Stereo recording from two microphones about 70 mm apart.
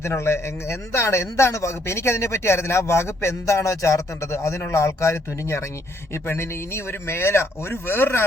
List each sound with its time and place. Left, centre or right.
0.0 s a man's voice: left